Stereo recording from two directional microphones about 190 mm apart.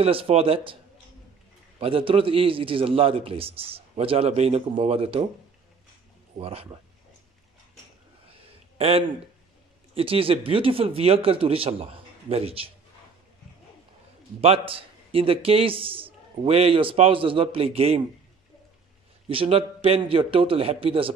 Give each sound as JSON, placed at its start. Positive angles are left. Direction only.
{"t": 0.0, "sound": "a man's voice", "side_deg": -30}
{"t": 1.8, "sound": "a man's voice", "side_deg": -30}
{"t": 6.3, "sound": "a man's voice", "side_deg": -30}
{"t": 8.7, "sound": "a man's voice", "side_deg": -30}
{"t": 14.4, "sound": "a man's voice", "side_deg": -30}
{"t": 19.2, "sound": "a man's voice", "side_deg": -30}